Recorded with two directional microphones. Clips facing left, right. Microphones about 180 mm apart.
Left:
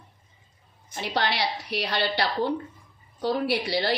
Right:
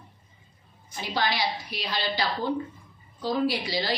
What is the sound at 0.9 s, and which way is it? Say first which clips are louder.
A woman's voice: left 1 dB; 65° left (ahead or behind).